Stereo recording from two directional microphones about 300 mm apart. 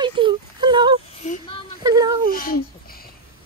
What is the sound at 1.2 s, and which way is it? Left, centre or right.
Speech, left.